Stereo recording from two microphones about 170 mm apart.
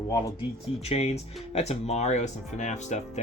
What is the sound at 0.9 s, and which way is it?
Speech, 40° left (ahead or behind).